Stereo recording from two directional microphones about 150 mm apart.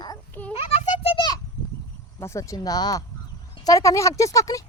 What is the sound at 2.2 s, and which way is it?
Speech, 20° left (ahead or behind).